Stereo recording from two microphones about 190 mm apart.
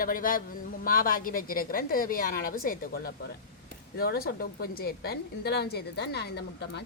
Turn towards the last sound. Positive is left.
turn(degrees=65)  # may be behind; listen again after turning